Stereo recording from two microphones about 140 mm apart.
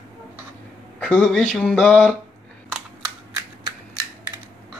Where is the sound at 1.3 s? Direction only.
5° left (ahead or behind).